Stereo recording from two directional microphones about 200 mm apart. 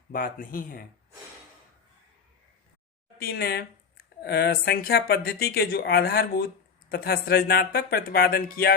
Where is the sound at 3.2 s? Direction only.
50° left (ahead or behind).